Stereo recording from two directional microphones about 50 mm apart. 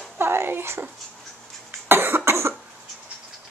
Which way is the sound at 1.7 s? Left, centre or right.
Right.